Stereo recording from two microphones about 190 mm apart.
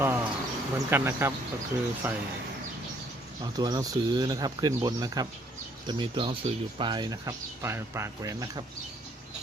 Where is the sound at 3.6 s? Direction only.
20° right (ahead or behind).